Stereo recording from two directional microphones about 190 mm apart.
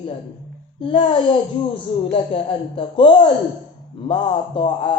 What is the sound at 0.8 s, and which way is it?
A man's voice, 25° left (ahead or behind).